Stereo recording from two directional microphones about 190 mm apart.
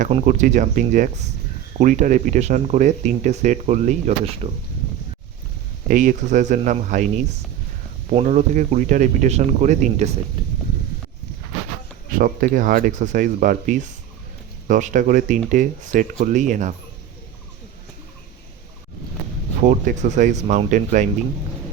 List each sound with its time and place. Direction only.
0.3 s speech: 40° right (ahead or behind)
5.9 s speech: 40° right (ahead or behind)
12.1 s speech: 50° right (ahead or behind)
19.6 s speech: 45° right (ahead or behind)